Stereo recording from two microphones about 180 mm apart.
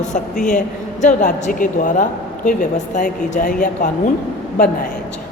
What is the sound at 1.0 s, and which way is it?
A woman's voice, 45° left (ahead or behind).